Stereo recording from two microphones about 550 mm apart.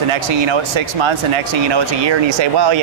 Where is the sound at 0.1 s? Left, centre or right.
Right.